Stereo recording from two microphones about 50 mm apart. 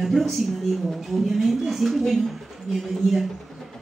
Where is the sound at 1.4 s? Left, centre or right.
Centre.